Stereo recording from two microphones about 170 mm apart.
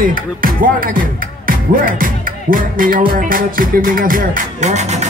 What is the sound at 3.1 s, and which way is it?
Music, 55° right (ahead or behind).